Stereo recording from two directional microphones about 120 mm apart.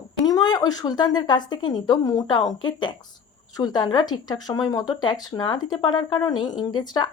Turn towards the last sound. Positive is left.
turn(degrees=35)  # may be behind; listen again after turning